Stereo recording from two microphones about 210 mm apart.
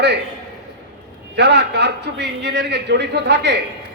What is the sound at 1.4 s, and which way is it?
A man's voice, 55° right (ahead or behind).